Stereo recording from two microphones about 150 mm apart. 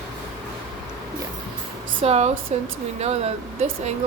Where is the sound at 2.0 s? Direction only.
45° right (ahead or behind).